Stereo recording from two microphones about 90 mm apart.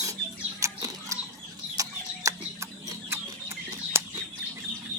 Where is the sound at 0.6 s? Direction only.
35° right (ahead or behind).